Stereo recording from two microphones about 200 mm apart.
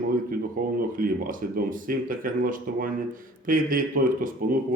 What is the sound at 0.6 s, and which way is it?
A man's voice, 45° right (ahead or behind).